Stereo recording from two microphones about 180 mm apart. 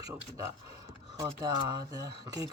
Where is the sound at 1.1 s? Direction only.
20° right (ahead or behind).